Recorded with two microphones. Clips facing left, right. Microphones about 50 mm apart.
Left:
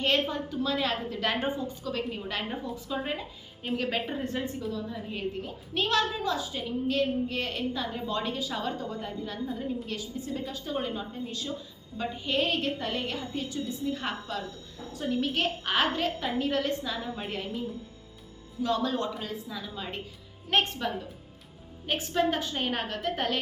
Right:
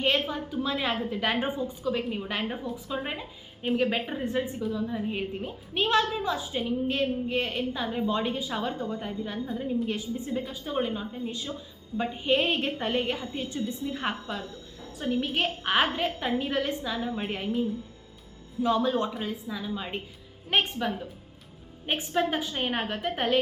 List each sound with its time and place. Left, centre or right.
0.0 s a woman's voice: centre
10.4 s a woman's voice: centre
18.6 s a woman's voice: centre